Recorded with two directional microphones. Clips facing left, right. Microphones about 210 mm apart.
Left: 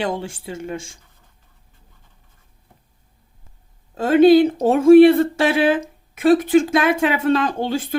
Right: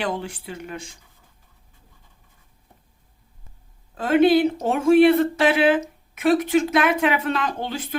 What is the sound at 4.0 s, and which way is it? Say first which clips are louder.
Speech: left 5 dB; 30° left (ahead or behind).